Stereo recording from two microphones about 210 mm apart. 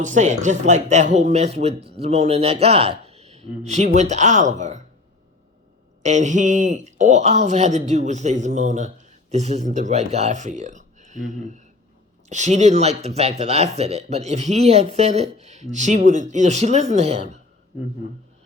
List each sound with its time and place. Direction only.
0.0 s speech: 35° right (ahead or behind)
6.0 s speech: 35° right (ahead or behind)